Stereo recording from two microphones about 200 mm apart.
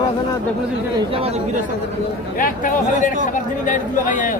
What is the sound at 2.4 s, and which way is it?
Speech, 40° left (ahead or behind).